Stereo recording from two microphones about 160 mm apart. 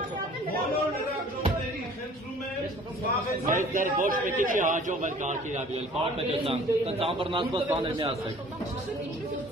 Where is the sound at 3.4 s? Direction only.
55° right (ahead or behind); by 8.1 s 30° right (ahead or behind).